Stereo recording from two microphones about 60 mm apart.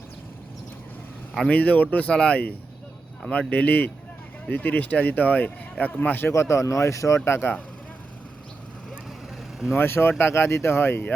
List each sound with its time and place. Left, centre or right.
1.5 s speech: left
6.3 s speech: left
7.3 s speech: left
9.7 s speech: left